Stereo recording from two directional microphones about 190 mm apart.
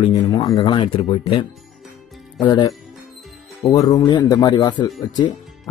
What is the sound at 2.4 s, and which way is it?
Speech, 20° left (ahead or behind).